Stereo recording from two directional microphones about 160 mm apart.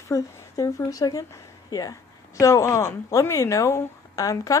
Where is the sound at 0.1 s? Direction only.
20° left (ahead or behind).